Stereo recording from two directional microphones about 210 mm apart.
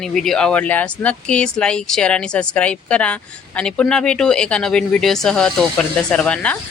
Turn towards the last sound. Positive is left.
turn(degrees=5)  # may be behind; listen again after turning